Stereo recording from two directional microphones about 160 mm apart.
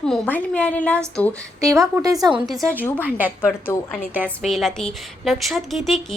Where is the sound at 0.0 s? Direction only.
5° left (ahead or behind).